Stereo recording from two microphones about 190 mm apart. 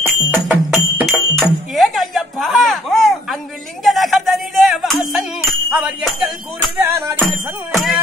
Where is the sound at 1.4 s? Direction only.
Centre (ahead or behind).